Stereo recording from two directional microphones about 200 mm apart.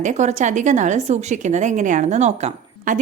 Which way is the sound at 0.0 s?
35° right (ahead or behind).